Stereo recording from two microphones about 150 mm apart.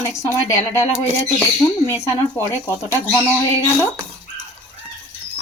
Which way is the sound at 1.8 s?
15° left (ahead or behind).